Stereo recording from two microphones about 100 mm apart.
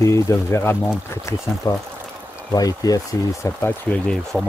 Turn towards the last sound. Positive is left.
turn(degrees=5)  # may be behind; listen again after turning